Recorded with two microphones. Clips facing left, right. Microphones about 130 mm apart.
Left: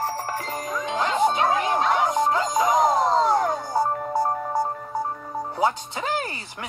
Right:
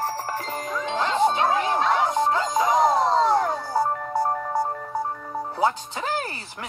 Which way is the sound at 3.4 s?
15° left (ahead or behind).